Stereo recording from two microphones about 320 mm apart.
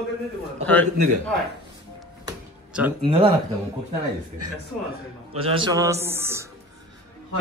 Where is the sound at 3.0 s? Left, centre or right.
Centre.